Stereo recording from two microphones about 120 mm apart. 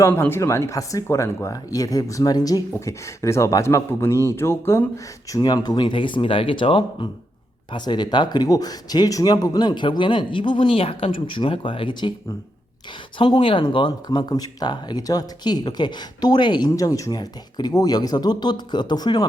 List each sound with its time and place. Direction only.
0.1 s speech: 20° left (ahead or behind)
5.3 s speech: 30° left (ahead or behind)
13.1 s speech: 45° left (ahead or behind)